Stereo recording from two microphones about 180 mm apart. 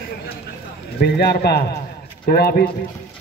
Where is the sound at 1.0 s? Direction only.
65° left (ahead or behind).